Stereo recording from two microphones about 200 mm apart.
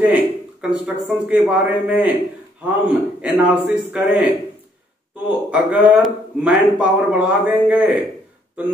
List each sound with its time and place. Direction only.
0.0 s speech: 5° right (ahead or behind)
5.5 s speech: 5° right (ahead or behind)